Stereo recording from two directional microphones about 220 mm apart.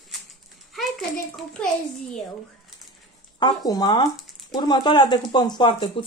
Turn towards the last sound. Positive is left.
turn(degrees=20)  # may be behind; listen again after turning